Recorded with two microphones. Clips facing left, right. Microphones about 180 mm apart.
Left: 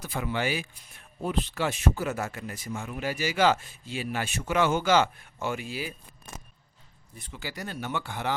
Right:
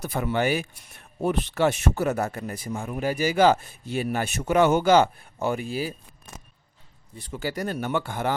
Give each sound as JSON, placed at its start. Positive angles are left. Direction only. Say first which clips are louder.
{"t": 0.2, "sound": "speech", "louder": "right 5 dB", "side_deg": -40}
{"t": 0.9, "sound": "speech", "louder": "right 7 dB", "side_deg": -70}
{"t": 2.1, "sound": "speech", "louder": "right 6 dB", "side_deg": -35}
{"t": 3.9, "sound": "speech", "louder": "right 6 dB", "side_deg": -50}
{"t": 4.5, "sound": "speech", "louder": "right 5 dB", "side_deg": -40}
{"t": 7.2, "sound": "speech", "louder": "right 8 dB", "side_deg": -45}